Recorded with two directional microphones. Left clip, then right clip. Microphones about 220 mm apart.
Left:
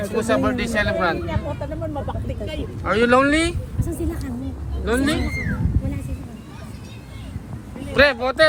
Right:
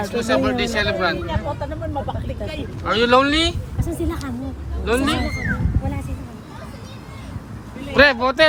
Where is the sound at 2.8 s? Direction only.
Centre (ahead or behind).